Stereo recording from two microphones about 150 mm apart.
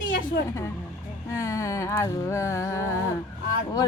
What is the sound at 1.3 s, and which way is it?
Speech, 20° left (ahead or behind).